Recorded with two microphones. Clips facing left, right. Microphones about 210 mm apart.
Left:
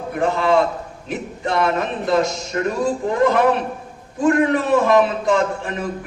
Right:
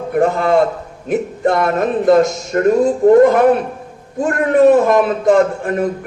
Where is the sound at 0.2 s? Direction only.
50° right (ahead or behind).